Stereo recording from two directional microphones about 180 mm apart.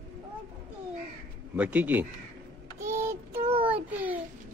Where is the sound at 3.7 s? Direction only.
10° right (ahead or behind).